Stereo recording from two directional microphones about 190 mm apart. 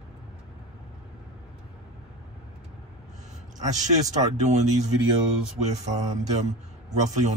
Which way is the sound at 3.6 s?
40° right (ahead or behind).